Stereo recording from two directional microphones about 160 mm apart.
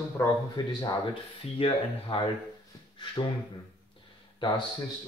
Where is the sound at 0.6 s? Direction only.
25° left (ahead or behind).